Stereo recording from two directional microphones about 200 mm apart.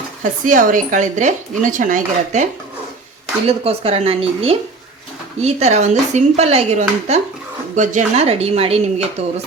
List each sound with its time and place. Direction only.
0.2 s speech: 40° right (ahead or behind)
3.6 s speech: 30° right (ahead or behind)